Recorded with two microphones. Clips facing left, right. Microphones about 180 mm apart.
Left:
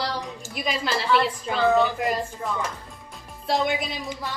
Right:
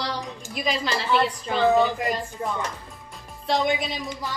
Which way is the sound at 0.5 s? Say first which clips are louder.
Right 1 dB; centre (ahead or behind).